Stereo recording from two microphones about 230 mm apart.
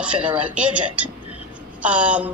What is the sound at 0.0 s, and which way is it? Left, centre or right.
A woman's voice, centre.